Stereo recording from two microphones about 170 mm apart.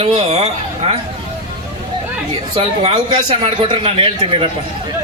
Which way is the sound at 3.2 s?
25° right (ahead or behind).